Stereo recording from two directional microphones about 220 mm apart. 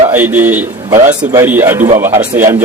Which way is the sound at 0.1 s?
10° right (ahead or behind).